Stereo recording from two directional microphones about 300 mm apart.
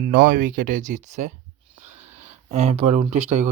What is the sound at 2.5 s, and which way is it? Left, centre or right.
Speech, right.